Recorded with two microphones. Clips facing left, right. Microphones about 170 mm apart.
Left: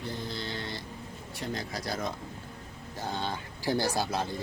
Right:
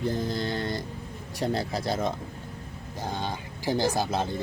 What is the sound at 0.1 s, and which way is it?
Mantra, 45° right (ahead or behind).